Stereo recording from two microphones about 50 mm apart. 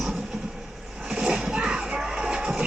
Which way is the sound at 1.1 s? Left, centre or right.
Centre.